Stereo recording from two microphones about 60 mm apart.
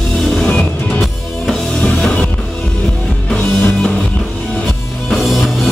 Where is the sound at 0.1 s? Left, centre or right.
Centre.